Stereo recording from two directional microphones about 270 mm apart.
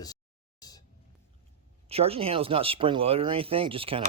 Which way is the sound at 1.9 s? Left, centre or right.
Right.